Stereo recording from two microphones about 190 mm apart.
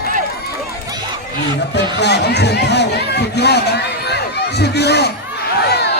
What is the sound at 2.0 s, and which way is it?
Chatter, 65° left (ahead or behind).